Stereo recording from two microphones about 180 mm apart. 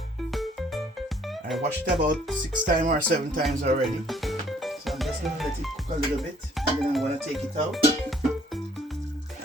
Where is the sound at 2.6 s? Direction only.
50° right (ahead or behind).